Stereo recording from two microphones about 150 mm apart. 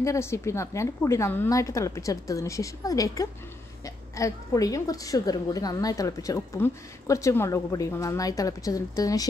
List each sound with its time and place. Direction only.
0.0 s a woman's voice: 20° left (ahead or behind)